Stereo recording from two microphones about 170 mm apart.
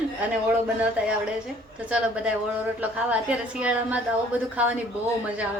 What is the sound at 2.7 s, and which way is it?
A woman's voice, 10° right (ahead or behind).